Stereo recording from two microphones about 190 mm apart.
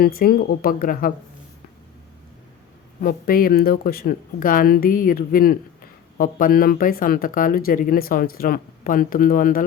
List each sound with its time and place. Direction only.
0.0 s speech: 50° left (ahead or behind)
3.0 s speech: 50° left (ahead or behind)